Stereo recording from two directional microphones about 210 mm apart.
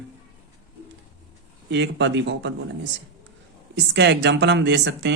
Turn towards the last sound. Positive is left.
turn(degrees=-55)  # may be behind; listen again after turning